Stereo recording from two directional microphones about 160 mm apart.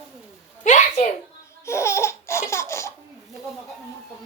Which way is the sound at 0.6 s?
50° left (ahead or behind).